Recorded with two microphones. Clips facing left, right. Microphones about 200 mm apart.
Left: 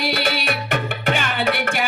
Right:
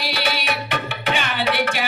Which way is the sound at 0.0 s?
55° left (ahead or behind).